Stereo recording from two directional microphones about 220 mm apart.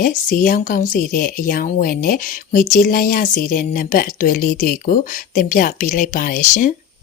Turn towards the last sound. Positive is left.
turn(degrees=35)  # may be behind; listen again after turning